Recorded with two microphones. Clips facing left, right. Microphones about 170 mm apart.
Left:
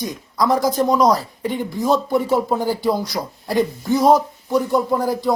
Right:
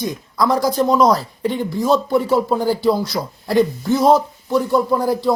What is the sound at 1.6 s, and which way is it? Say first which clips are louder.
A man's voice: right 1 dB; 20° left (ahead or behind).